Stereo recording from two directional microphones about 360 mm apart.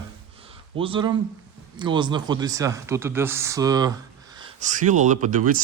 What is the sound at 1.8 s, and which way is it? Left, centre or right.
Speech, centre.